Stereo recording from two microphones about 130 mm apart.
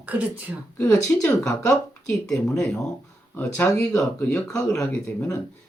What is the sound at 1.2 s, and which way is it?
Speech, 20° left (ahead or behind).